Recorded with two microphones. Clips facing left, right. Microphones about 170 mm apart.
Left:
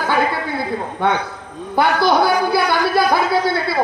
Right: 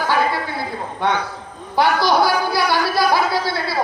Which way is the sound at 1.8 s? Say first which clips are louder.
Left 1 dB; 55° left (ahead or behind).